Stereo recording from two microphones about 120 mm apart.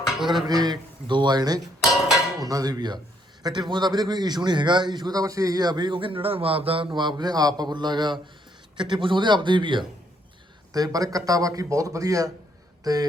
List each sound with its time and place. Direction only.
0.4 s a man's voice: 35° right (ahead or behind)
10.7 s speech: 30° right (ahead or behind)